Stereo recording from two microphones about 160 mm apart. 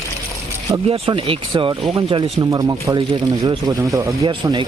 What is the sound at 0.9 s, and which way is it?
Speech, 35° right (ahead or behind).